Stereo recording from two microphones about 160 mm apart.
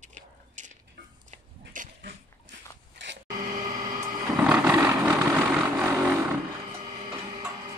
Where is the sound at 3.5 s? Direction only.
55° right (ahead or behind).